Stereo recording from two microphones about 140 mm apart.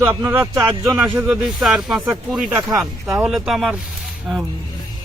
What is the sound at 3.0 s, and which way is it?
Speech, 10° right (ahead or behind).